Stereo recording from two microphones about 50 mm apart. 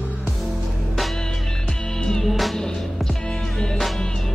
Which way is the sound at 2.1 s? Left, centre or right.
Centre.